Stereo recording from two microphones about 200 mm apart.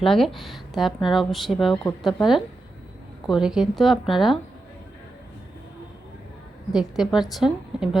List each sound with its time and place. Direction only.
0.0 s speech: centre (ahead or behind)
3.2 s speech: centre (ahead or behind)
6.7 s speech: centre (ahead or behind)